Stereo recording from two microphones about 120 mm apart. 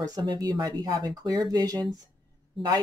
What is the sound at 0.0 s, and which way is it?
Speech, 35° right (ahead or behind).